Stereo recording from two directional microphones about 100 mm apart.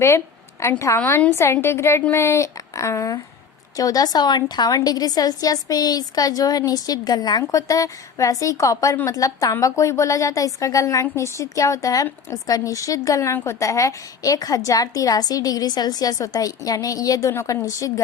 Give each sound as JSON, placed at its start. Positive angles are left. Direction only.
{"t": 0.6, "sound": "a woman's voice", "side_deg": 30}